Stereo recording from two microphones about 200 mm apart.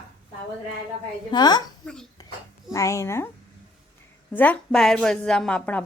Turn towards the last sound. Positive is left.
turn(degrees=5)  # may be behind; listen again after turning